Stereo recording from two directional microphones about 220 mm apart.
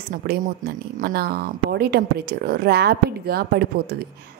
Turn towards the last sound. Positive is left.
turn(degrees=-45)  # may be behind; listen again after turning